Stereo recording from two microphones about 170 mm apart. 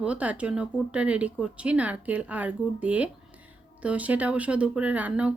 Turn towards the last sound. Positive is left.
turn(degrees=-5)  # may be behind; listen again after turning